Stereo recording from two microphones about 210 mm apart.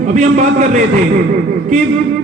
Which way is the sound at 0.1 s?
35° right (ahead or behind).